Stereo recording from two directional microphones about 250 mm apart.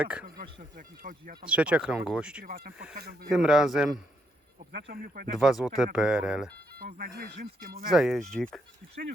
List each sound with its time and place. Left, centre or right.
0.0 s speech: centre
0.8 s speech: right
1.5 s speech: centre
2.4 s speech: right
3.2 s speech: centre
4.8 s speech: right
5.4 s speech: centre
6.7 s speech: right
7.9 s speech: centre